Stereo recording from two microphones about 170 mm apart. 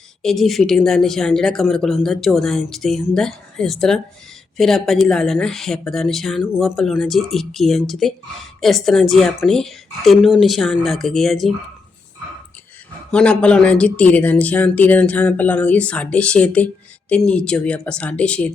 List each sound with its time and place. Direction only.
0.2 s a woman's voice: centre (ahead or behind)
13.1 s speech: 5° left (ahead or behind)